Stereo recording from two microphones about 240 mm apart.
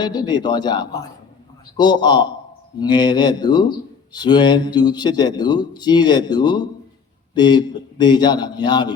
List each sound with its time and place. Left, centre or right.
0.0 s speech: centre